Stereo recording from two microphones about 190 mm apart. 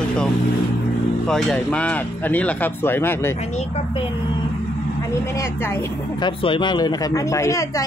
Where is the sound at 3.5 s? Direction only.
35° left (ahead or behind).